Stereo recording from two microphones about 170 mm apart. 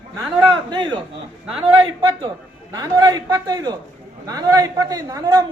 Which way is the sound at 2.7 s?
25° right (ahead or behind).